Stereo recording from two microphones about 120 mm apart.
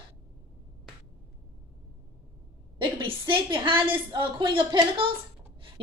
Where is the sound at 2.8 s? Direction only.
45° right (ahead or behind).